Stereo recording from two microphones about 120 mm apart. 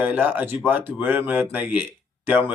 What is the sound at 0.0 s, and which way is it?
Speech, 15° right (ahead or behind).